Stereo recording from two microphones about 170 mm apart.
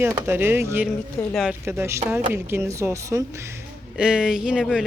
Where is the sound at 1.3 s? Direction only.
Centre (ahead or behind).